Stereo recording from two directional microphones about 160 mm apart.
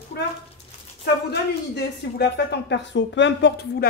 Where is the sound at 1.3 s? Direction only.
90° left.